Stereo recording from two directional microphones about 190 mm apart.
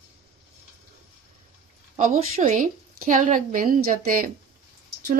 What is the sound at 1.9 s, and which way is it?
Speech, 40° right (ahead or behind).